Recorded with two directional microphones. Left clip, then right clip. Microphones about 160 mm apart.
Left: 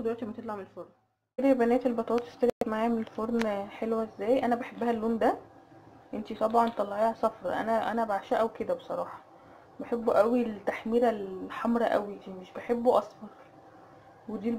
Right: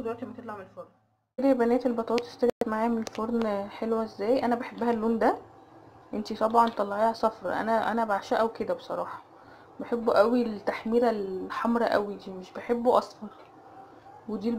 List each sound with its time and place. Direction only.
0.0 s speech: 35° left (ahead or behind)
1.4 s a woman's voice: centre (ahead or behind)
6.2 s speech: 10° right (ahead or behind)
6.5 s a woman's voice: centre (ahead or behind)